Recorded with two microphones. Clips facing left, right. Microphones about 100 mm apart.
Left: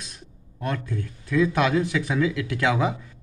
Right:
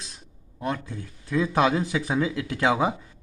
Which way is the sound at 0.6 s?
20° right (ahead or behind).